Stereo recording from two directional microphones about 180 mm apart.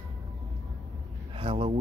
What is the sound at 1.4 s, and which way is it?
Speech, 35° right (ahead or behind).